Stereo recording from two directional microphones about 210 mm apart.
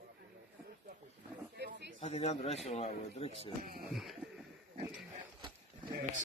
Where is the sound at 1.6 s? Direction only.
50° right (ahead or behind).